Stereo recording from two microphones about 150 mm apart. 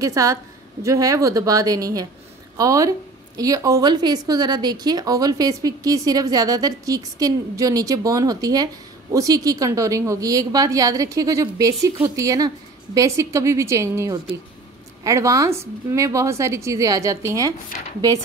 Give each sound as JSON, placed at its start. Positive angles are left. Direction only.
{"t": 0.0, "sound": "speech", "side_deg": -20}